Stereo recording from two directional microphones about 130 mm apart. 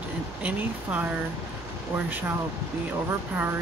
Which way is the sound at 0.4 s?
10° right (ahead or behind).